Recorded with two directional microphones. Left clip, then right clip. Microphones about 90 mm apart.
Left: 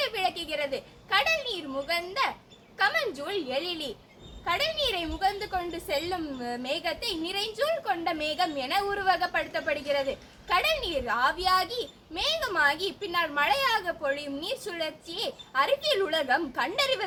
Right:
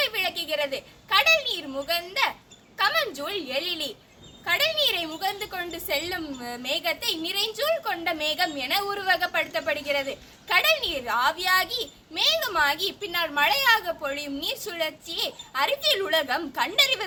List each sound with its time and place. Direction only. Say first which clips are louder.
0.0 s a woman's voice: right 3 dB; 20° left (ahead or behind)